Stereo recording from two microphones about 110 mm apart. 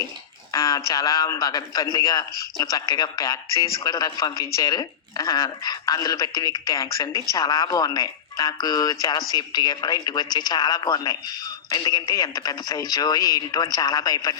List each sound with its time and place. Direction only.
0.5 s a man's voice: 30° left (ahead or behind)